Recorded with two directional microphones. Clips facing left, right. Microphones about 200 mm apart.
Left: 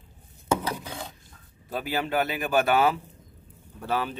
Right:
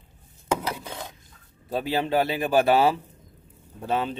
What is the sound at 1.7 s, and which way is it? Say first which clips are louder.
Speech: right 4 dB; 25° right (ahead or behind).